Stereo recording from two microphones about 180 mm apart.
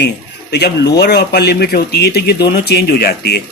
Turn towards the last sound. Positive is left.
turn(degrees=65)  # may be behind; listen again after turning